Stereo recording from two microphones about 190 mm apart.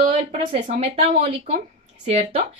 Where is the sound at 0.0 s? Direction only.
30° right (ahead or behind).